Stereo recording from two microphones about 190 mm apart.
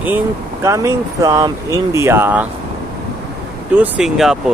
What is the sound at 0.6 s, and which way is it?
Speech, 15° right (ahead or behind).